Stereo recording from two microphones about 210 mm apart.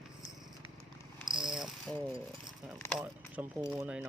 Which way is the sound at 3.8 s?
5° right (ahead or behind).